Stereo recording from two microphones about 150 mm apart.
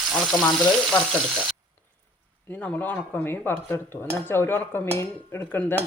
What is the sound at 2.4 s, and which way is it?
Cutlery, 10° left (ahead or behind).